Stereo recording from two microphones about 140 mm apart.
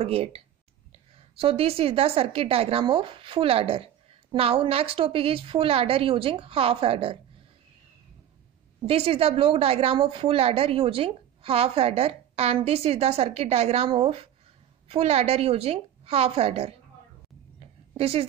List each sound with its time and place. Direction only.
0.0 s a woman's voice: 45° right (ahead or behind)
8.8 s a woman's voice: 45° right (ahead or behind)
17.6 s a sound: 45° right (ahead or behind)